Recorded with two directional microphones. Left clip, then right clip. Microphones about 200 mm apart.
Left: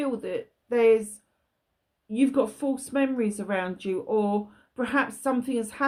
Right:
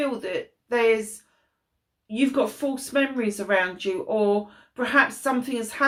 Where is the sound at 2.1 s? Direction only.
45° left (ahead or behind).